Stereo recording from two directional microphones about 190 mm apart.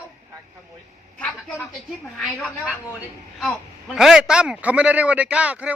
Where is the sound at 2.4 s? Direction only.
5° right (ahead or behind).